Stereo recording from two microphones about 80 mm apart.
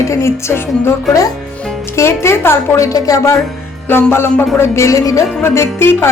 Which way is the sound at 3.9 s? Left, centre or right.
Left.